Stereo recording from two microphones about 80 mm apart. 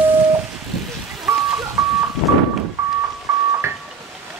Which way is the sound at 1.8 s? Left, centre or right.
Right.